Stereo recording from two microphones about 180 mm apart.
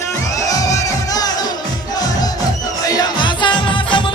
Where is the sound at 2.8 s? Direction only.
20° left (ahead or behind).